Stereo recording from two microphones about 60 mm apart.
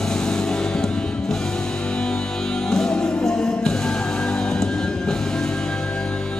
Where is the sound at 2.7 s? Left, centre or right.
Centre.